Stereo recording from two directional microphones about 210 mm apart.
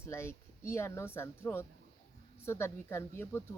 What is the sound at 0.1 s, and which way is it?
Speech, 10° left (ahead or behind).